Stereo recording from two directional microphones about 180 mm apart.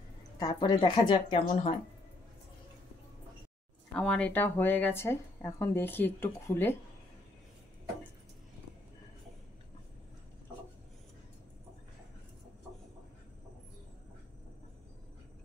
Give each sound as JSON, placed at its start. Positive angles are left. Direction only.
{"t": 0.4, "sound": "a woman's voice", "side_deg": 20}
{"t": 3.9, "sound": "speech", "side_deg": 5}